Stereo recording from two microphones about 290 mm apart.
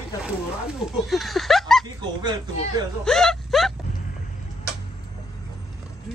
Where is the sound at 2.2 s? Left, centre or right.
Centre.